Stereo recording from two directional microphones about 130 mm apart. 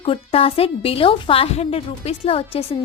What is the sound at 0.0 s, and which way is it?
A woman's voice, 45° left (ahead or behind).